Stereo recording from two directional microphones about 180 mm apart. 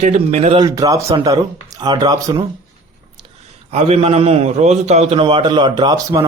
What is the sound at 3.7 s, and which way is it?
A man's voice, 35° right (ahead or behind).